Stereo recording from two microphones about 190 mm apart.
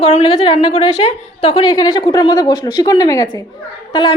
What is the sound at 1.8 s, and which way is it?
A woman's voice, 20° left (ahead or behind).